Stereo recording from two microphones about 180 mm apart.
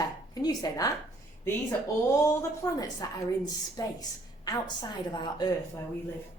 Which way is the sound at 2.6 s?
20° left (ahead or behind).